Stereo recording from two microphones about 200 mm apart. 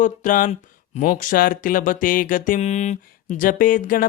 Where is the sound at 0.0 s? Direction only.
40° left (ahead or behind).